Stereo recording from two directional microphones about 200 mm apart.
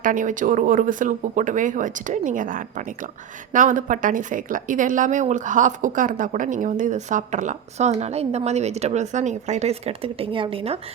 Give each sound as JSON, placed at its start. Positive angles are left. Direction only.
{"t": 0.0, "sound": "speech", "side_deg": -40}